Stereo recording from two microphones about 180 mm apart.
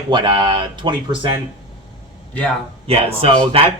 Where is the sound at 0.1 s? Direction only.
25° right (ahead or behind).